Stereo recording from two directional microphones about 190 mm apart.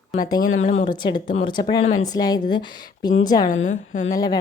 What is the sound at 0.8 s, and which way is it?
Speech, 25° left (ahead or behind).